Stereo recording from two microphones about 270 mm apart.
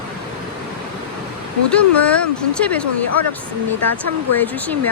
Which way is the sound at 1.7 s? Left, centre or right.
Centre.